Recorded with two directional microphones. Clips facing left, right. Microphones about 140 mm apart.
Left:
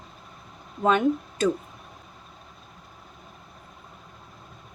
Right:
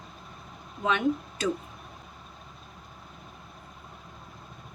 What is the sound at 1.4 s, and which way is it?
Speech, 50° left (ahead or behind).